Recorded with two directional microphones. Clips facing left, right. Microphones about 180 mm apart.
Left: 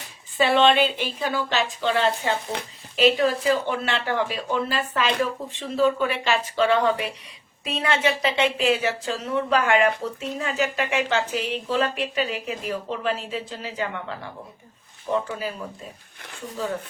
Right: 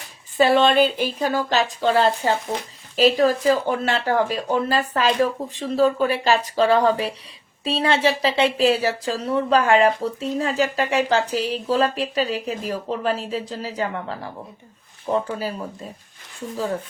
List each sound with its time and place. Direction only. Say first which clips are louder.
0.3 s speech: right 3 dB; 40° right (ahead or behind)